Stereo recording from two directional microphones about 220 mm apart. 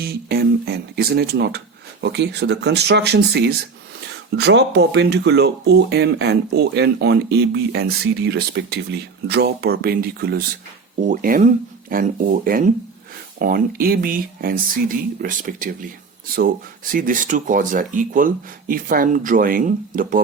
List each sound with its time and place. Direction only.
0.0 s speech: 45° right (ahead or behind)
16.9 s speech: 40° right (ahead or behind)